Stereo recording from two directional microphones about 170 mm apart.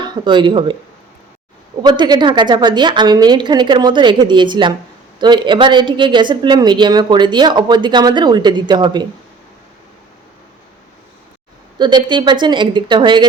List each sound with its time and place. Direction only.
0.0 s speech: 25° right (ahead or behind)
1.8 s a woman's voice: 25° right (ahead or behind)
11.8 s a woman's voice: 25° right (ahead or behind)